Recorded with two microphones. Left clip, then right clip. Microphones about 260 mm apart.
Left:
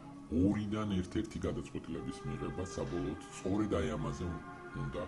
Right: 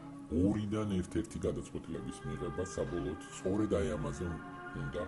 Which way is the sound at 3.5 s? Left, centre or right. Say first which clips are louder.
Right 1 dB; right.